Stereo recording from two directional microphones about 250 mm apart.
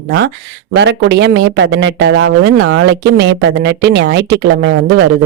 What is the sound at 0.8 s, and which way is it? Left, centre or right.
Speech, right.